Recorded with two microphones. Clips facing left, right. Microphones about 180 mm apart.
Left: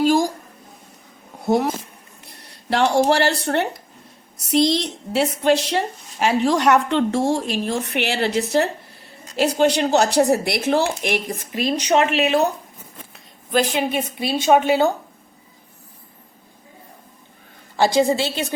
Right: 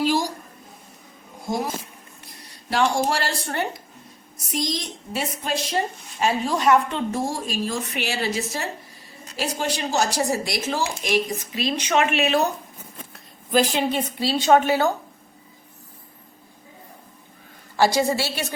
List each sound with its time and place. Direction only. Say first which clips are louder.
0.0 s a sound: left 5 dB; 50° left (ahead or behind)
1.5 s a woman's voice: left 7 dB; 65° left (ahead or behind); by 12.4 s 25° left (ahead or behind)
13.5 s a woman's voice: left 1 dB; centre (ahead or behind)
13.9 s a woman's voice: left 1 dB; 15° left (ahead or behind)
17.7 s a woman's voice: left 3 dB; 20° left (ahead or behind)